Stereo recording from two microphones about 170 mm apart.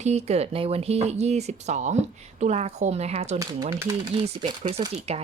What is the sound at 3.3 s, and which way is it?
Speech, 20° right (ahead or behind).